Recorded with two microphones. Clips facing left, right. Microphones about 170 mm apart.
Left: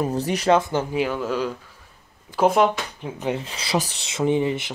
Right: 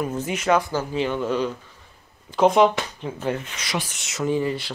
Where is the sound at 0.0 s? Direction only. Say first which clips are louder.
Left 3 dB; 35° left (ahead or behind).